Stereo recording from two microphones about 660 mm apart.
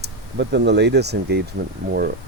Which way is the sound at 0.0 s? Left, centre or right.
Centre.